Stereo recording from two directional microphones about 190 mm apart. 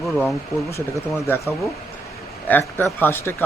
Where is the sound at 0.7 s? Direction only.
15° left (ahead or behind).